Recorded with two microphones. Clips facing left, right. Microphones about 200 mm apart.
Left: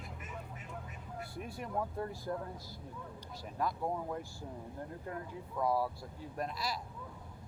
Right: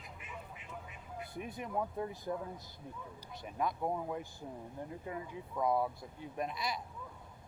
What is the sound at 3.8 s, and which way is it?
Speech, 5° right (ahead or behind).